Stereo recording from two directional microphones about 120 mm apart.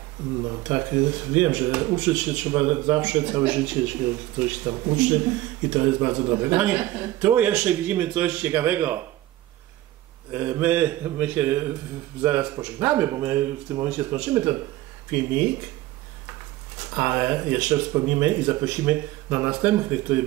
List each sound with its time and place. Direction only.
0.7 s speech: 20° right (ahead or behind)
10.3 s speech: 15° right (ahead or behind)
16.8 s speech: 15° right (ahead or behind)